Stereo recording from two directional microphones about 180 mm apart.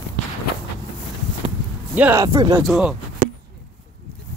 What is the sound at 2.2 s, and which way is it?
Speech, 20° right (ahead or behind).